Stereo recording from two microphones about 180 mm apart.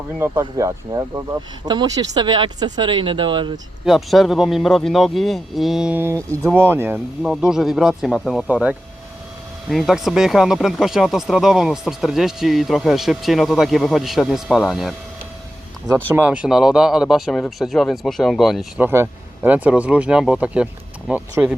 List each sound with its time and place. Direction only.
0.2 s speech: 15° right (ahead or behind)
3.8 s speech: centre (ahead or behind)
16.1 s speech: 5° right (ahead or behind)
18.9 s speech: 10° right (ahead or behind)